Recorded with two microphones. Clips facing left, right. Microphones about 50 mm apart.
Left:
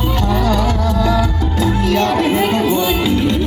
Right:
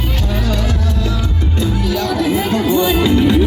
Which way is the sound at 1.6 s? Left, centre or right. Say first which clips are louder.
Left 4 dB; left.